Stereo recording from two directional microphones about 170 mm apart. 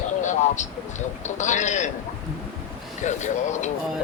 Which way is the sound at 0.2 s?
45° left (ahead or behind).